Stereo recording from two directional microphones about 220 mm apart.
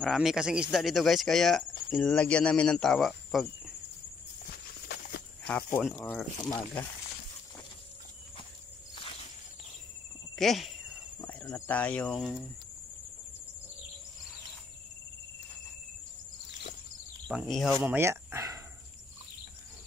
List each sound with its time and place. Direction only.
0.0 s speech: centre (ahead or behind)
4.8 s walk: 50° left (ahead or behind)
5.5 s speech: 5° left (ahead or behind)
10.3 s cricket: centre (ahead or behind)
17.3 s speech: centre (ahead or behind)
17.7 s speech: 10° right (ahead or behind)